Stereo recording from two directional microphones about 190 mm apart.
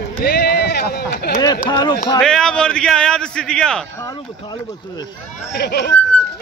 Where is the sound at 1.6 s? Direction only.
20° left (ahead or behind).